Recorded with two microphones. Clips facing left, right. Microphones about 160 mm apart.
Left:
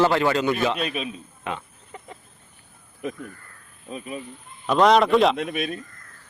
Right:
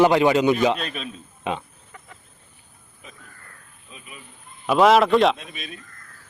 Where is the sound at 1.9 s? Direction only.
25° left (ahead or behind).